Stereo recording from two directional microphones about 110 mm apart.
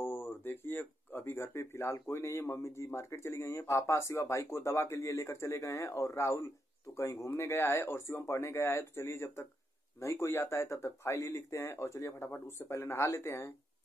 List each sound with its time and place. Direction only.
0.0 s speech: 20° left (ahead or behind)